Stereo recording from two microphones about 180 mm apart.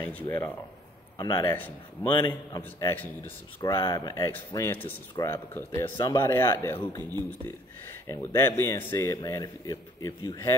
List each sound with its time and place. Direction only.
0.0 s a man's voice: 10° left (ahead or behind)
1.1 s a man's voice: 20° left (ahead or behind)
3.6 s a man's voice: 25° left (ahead or behind)
7.0 s speech: 20° right (ahead or behind)
8.1 s a man's voice: 15° left (ahead or behind)